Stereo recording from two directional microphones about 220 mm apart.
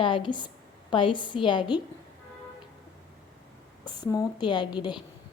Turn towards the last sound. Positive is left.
turn(degrees=20)  # may be behind; listen again after turning